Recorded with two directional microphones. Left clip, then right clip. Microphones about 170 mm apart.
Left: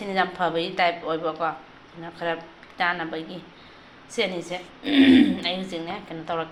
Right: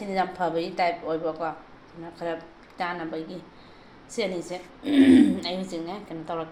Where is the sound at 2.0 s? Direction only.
10° right (ahead or behind).